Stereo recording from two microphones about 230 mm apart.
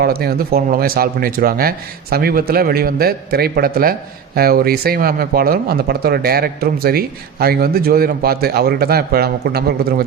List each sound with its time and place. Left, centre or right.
0.0 s speech: right